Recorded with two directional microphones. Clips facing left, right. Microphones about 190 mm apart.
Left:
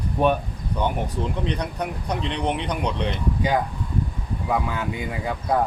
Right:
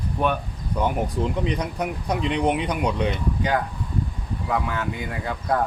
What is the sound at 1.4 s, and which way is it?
Speech, 10° right (ahead or behind).